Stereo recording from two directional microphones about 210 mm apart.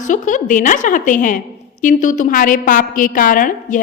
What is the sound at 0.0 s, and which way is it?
A woman's voice, 35° left (ahead or behind).